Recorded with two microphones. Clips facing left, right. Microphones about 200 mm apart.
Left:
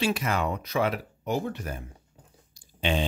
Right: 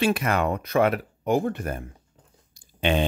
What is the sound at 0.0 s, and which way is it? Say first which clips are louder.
Speech: right 4 dB; 55° right (ahead or behind).